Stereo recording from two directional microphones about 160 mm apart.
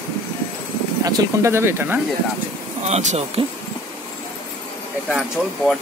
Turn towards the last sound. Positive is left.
turn(degrees=0)  # may be behind; listen again after turning